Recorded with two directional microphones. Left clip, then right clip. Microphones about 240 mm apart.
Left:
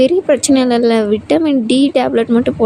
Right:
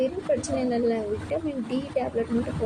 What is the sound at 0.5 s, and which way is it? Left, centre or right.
Speech, left.